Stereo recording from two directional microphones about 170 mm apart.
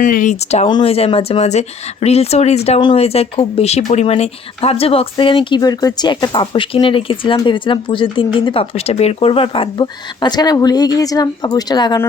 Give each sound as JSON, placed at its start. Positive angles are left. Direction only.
{"t": 0.0, "sound": "speech", "side_deg": 50}
{"t": 0.7, "sound": "speech", "side_deg": 30}